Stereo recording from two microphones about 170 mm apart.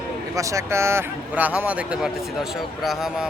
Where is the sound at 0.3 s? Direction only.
20° right (ahead or behind).